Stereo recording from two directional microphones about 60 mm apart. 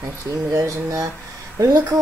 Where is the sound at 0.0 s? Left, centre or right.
Right.